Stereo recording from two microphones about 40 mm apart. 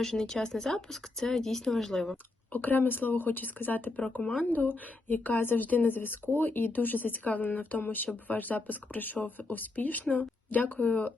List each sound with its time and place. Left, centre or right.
0.0 s speech: centre
2.5 s a woman's voice: left